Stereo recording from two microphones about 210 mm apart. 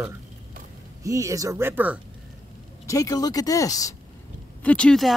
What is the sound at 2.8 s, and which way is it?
Speech, 15° left (ahead or behind).